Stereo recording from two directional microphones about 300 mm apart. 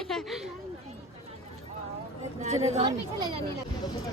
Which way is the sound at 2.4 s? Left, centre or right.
Right.